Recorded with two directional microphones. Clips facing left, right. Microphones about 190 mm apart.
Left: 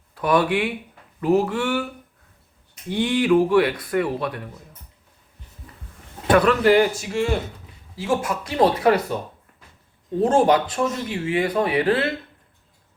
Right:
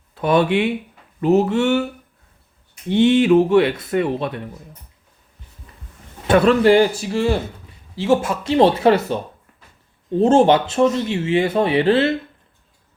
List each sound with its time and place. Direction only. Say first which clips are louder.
0.1 s speech: right 3 dB; 25° right (ahead or behind)
2.9 s speech: right 5 dB; 25° right (ahead or behind)
6.2 s speech: right 3 dB; 25° right (ahead or behind)